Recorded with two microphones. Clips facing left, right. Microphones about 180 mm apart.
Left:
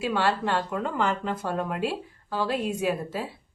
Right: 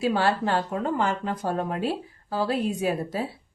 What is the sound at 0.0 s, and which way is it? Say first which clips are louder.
Speech: right 2 dB; 40° right (ahead or behind).